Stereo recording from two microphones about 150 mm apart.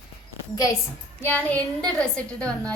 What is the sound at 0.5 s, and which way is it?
Speech, 25° left (ahead or behind).